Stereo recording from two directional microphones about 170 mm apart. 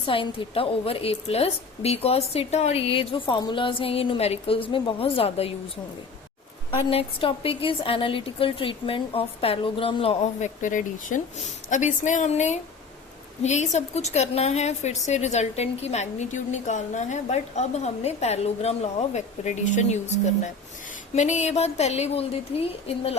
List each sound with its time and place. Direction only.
0.0 s a woman's voice: 30° left (ahead or behind)
6.7 s a woman's voice: 30° left (ahead or behind)
10.6 s a woman's voice: 50° left (ahead or behind)